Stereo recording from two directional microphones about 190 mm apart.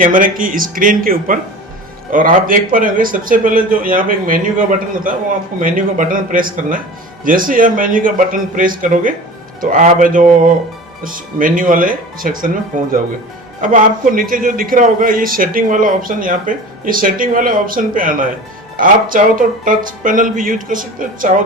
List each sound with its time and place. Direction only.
0.0 s a man's voice: 45° right (ahead or behind)
14.1 s a man's voice: 45° right (ahead or behind)